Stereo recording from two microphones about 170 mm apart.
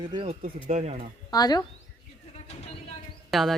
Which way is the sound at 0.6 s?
40° right (ahead or behind).